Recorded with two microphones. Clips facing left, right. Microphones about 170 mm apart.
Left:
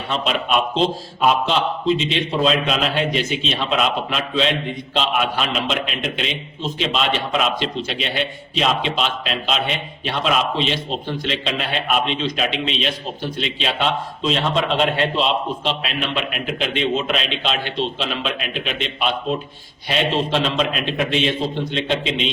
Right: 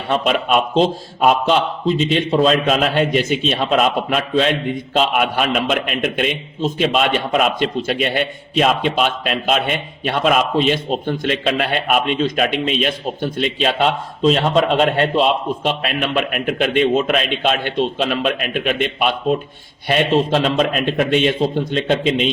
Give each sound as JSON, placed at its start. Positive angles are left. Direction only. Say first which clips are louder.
{"t": 0.1, "sound": "a man's voice", "louder": "right 4 dB", "side_deg": -50}